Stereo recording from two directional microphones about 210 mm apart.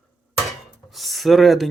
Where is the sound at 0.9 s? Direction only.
Centre (ahead or behind).